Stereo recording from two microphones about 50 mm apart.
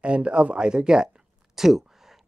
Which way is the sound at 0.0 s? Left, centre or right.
Right.